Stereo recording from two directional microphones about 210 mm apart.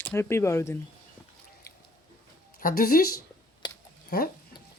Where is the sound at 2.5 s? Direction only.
45° left (ahead or behind).